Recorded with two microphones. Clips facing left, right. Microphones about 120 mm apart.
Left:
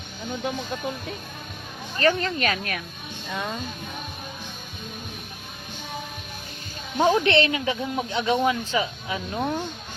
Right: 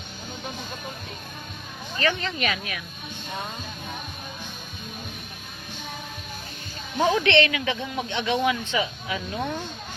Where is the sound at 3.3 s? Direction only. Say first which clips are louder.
Left 4 dB; 90° left.